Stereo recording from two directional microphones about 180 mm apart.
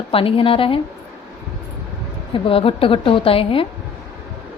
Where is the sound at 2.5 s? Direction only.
30° left (ahead or behind).